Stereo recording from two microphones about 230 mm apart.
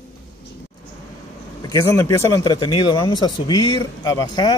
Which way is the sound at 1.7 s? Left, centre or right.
Centre.